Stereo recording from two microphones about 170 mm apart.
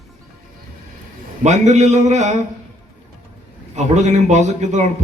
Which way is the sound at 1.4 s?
45° right (ahead or behind).